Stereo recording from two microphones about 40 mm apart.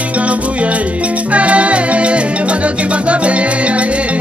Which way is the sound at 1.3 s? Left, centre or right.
Right.